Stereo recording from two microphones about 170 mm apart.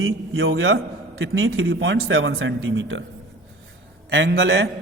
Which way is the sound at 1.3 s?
75° right (ahead or behind).